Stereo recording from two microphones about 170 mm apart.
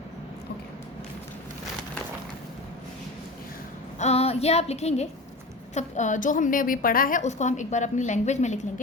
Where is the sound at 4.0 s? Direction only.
35° left (ahead or behind).